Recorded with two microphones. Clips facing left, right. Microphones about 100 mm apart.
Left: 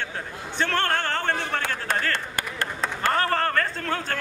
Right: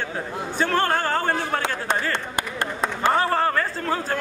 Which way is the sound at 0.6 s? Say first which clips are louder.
Right 3 dB; 10° right (ahead or behind).